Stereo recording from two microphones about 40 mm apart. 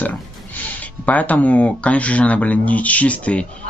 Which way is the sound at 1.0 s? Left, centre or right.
Left.